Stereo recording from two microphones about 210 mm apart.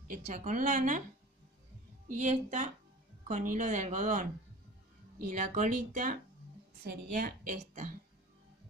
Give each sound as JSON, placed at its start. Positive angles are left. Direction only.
{"t": 0.1, "sound": "a woman's voice", "side_deg": -40}
{"t": 2.0, "sound": "a woman's voice", "side_deg": -35}